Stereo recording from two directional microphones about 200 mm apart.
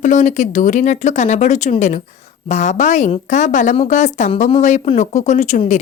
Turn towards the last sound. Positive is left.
turn(degrees=35)  # may be behind; listen again after turning